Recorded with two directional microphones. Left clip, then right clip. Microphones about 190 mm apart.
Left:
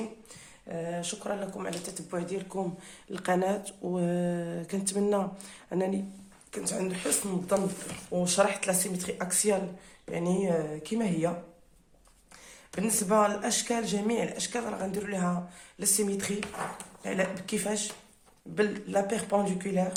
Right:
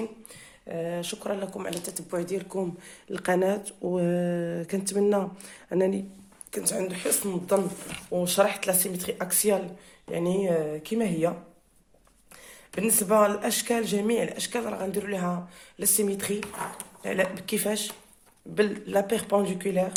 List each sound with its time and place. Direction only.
0.7 s speech: 30° right (ahead or behind)
3.1 s speech: 25° right (ahead or behind)
6.5 s speech: 35° right (ahead or behind)
12.7 s speech: 30° right (ahead or behind)